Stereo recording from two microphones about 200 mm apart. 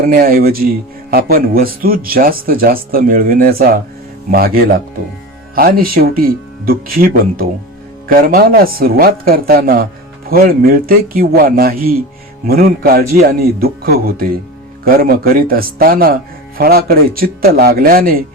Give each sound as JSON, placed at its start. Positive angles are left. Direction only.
{"t": 0.0, "sound": "speech", "side_deg": -45}